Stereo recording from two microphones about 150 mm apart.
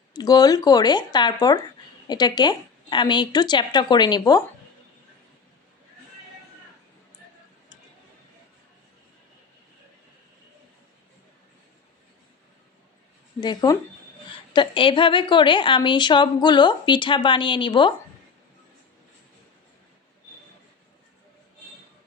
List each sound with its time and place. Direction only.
0.1 s a woman's voice: 25° left (ahead or behind)
13.4 s a woman's voice: 30° left (ahead or behind)